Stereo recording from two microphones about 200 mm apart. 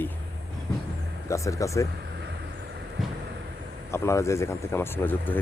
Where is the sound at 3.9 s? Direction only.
15° left (ahead or behind).